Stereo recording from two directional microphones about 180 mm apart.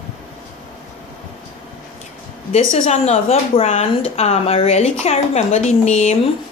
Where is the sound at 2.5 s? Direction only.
40° left (ahead or behind).